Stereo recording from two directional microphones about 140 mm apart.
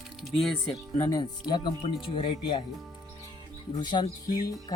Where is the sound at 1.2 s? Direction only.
30° left (ahead or behind).